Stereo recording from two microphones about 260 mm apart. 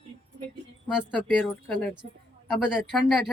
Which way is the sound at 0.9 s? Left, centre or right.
Centre.